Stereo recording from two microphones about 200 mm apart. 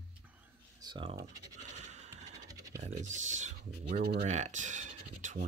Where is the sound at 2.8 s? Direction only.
35° right (ahead or behind).